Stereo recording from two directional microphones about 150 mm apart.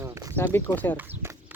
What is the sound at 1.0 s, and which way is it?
Speech, 15° right (ahead or behind).